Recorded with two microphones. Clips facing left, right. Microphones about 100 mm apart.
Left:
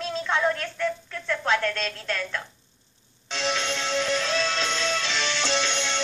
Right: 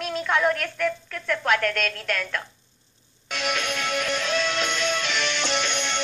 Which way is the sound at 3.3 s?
25° left (ahead or behind).